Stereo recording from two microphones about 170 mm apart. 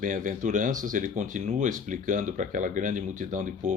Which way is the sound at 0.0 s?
50° right (ahead or behind).